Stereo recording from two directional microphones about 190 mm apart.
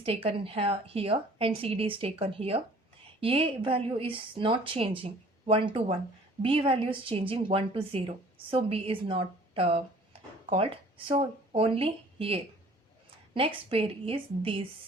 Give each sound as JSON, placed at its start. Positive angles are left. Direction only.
{"t": 0.0, "sound": "a woman's voice", "side_deg": -30}